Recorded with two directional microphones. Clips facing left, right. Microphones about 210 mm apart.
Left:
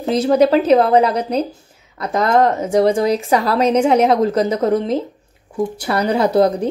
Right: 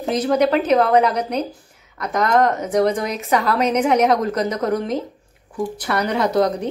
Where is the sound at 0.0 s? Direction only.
30° left (ahead or behind).